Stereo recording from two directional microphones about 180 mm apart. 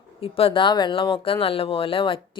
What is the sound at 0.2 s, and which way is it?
Speech, 30° left (ahead or behind).